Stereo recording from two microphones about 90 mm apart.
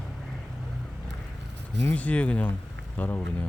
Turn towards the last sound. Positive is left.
turn(degrees=20)  # may be behind; listen again after turning